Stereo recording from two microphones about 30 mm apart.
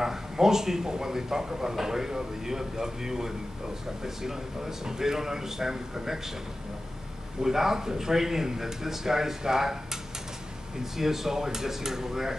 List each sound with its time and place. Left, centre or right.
0.0 s speech: centre
7.4 s speech: centre
10.8 s speech: centre